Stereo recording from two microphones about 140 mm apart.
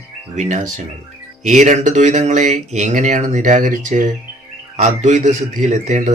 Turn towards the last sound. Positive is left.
turn(degrees=-55)  # may be behind; listen again after turning